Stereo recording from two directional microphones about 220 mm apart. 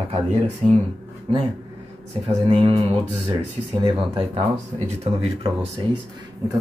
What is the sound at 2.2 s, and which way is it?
Speech, 25° right (ahead or behind).